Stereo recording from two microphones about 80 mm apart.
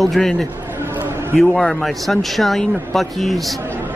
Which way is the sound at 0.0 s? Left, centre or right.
Centre.